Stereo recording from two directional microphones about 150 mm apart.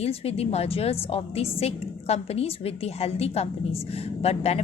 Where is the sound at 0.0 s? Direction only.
40° left (ahead or behind).